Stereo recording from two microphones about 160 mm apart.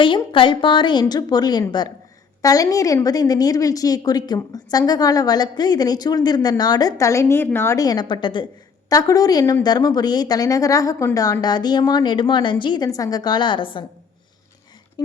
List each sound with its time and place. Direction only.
0.0 s a woman's voice: 30° left (ahead or behind)
15.0 s speech: 25° left (ahead or behind)